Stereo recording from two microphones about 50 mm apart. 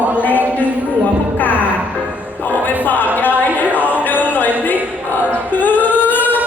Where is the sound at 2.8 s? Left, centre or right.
Left.